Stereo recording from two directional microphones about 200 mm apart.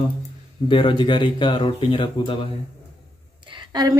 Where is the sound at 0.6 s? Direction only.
25° left (ahead or behind).